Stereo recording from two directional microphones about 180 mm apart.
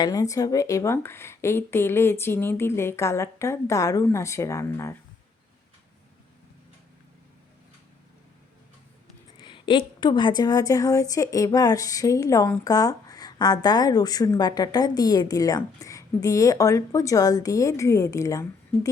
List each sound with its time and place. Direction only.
0.0 s speech: 20° left (ahead or behind)
9.4 s a woman's voice: 25° left (ahead or behind)